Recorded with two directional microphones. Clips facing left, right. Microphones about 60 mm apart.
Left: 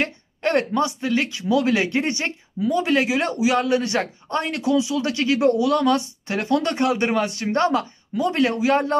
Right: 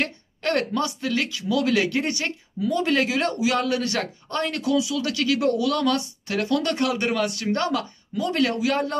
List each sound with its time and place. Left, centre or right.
0.0 s speech: left